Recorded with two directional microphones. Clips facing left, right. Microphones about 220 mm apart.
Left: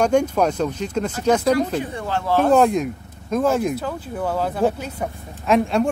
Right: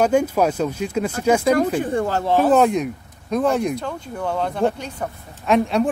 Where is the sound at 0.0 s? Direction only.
5° right (ahead or behind).